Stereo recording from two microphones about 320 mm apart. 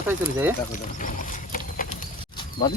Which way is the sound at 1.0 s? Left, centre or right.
Left.